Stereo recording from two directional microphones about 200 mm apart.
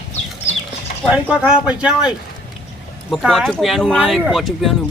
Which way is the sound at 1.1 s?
5° right (ahead or behind).